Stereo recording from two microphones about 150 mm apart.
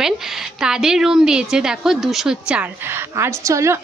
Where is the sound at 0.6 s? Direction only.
5° right (ahead or behind).